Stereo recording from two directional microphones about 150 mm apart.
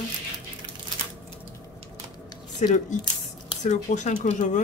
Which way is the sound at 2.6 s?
55° left (ahead or behind).